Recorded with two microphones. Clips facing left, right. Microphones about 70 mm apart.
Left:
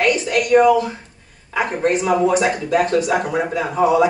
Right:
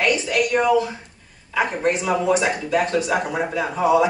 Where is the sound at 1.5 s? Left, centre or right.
Left.